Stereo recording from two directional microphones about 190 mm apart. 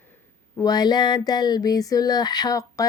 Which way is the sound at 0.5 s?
20° left (ahead or behind).